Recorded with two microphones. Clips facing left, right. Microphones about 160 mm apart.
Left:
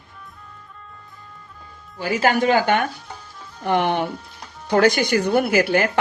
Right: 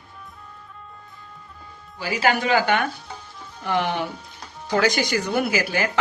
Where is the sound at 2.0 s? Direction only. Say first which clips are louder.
Left 3 dB; 45° left (ahead or behind).